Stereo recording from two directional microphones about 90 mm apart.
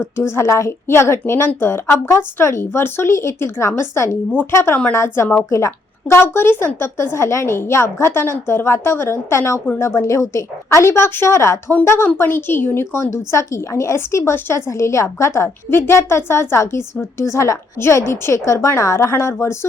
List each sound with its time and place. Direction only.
0.0 s a woman's voice: 30° left (ahead or behind)